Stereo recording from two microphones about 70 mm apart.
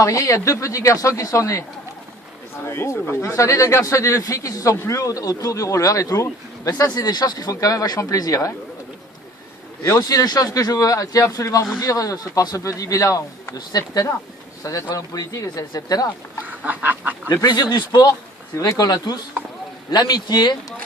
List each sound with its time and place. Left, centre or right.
0.0 s speech: left
2.6 s speech: left
9.8 s speech: left
16.5 s chicken: right
17.4 s speech: left
18.5 s speech: left